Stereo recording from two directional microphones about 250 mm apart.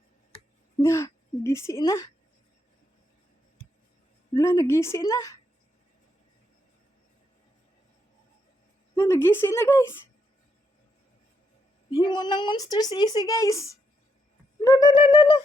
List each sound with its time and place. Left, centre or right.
0.8 s speech: centre
4.4 s speech: centre
9.0 s speech: centre
11.9 s speech: centre
14.6 s a sound: centre